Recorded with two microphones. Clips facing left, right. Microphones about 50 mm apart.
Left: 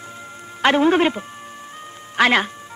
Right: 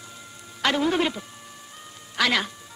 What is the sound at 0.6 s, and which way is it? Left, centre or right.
A woman's voice, left.